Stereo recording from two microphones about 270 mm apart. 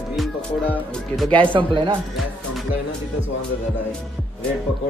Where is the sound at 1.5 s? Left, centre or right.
Centre.